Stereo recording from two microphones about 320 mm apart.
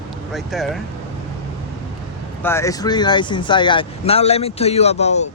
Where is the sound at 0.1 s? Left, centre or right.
Centre.